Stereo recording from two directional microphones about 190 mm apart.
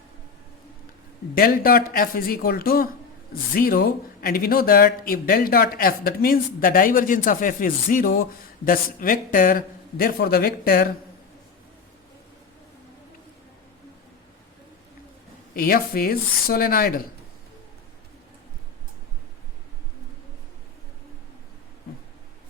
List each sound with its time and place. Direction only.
1.4 s speech: 50° left (ahead or behind)
15.5 s speech: 50° left (ahead or behind)